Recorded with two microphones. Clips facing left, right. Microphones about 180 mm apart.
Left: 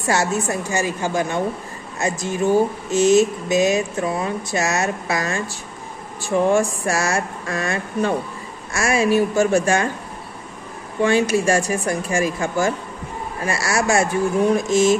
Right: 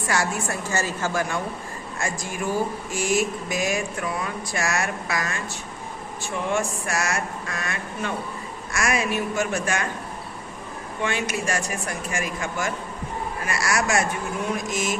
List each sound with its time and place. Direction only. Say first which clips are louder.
0.0 s speech: left 5 dB; 25° left (ahead or behind)
6.4 s speech: left 7 dB; 30° left (ahead or behind)
11.0 s speech: left 10 dB; 35° left (ahead or behind)